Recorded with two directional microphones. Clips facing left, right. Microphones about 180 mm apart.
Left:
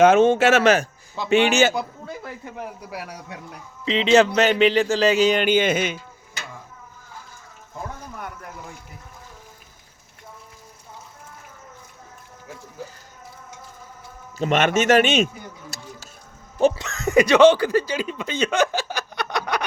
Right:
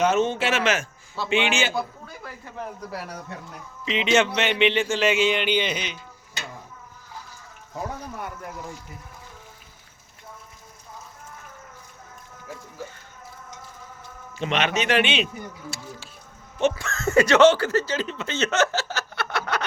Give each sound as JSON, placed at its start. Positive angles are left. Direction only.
{"t": 0.2, "sound": "a man's voice", "side_deg": 50}
{"t": 1.7, "sound": "speech", "side_deg": 20}
{"t": 3.8, "sound": "speech", "side_deg": 35}
{"t": 14.3, "sound": "a man's voice", "side_deg": 45}
{"t": 15.7, "sound": "a sound", "side_deg": 40}
{"t": 16.7, "sound": "speech", "side_deg": 15}